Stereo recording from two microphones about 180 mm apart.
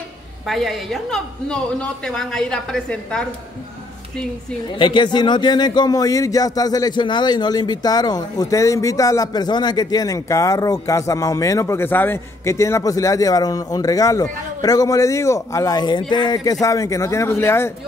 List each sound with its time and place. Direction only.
0.5 s speech: centre (ahead or behind)
4.6 s a man's voice: 25° left (ahead or behind)